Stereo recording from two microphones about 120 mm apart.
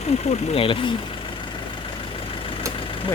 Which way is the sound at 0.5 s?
45° left (ahead or behind).